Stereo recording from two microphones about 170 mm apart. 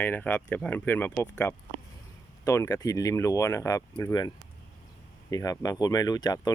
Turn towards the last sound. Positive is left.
turn(degrees=20)  # may be behind; listen again after turning